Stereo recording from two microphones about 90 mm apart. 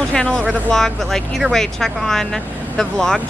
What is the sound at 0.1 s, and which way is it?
A woman's voice, 10° left (ahead or behind).